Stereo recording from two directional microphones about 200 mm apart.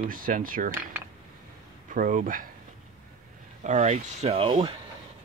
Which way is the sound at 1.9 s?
45° right (ahead or behind).